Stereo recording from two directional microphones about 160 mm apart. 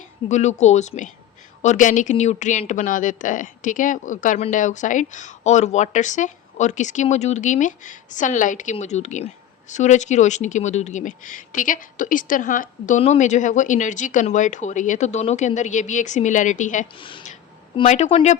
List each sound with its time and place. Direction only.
0.3 s speech: 45° left (ahead or behind)
17.0 s speech: 30° left (ahead or behind)
17.8 s speech: 45° left (ahead or behind)